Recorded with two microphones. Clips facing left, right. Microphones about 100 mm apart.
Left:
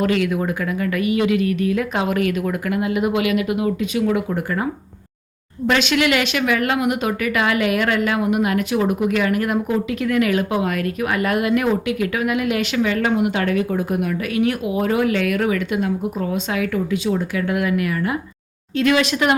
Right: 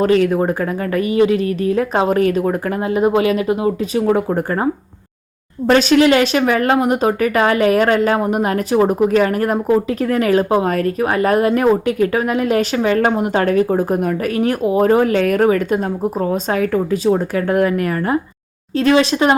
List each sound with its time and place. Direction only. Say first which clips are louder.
0.0 s speech: right 6 dB; 35° right (ahead or behind)